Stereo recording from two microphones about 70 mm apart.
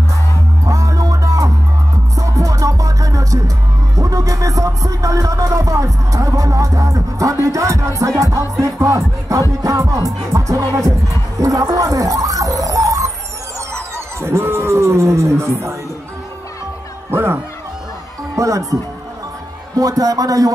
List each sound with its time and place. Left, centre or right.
0.7 s music: right
11.3 s bird: right
13.9 s a sound: right
17.1 s music: right
18.3 s music: right
19.8 s a man's voice: right